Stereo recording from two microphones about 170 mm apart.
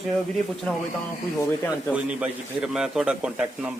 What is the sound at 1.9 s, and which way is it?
Speech, 5° right (ahead or behind).